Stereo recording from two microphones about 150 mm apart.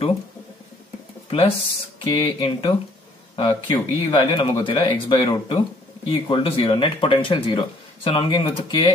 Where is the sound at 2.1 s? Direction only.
35° left (ahead or behind).